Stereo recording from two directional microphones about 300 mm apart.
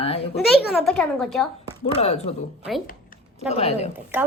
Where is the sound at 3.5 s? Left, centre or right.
Left.